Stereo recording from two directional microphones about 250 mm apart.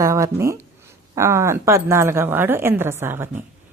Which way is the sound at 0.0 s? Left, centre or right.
Centre.